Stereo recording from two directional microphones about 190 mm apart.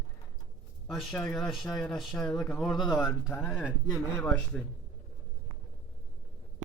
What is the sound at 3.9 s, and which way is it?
Speech, 10° left (ahead or behind).